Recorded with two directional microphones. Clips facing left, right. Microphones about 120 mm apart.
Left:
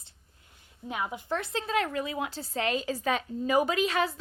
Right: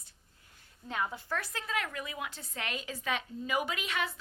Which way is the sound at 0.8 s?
15° left (ahead or behind).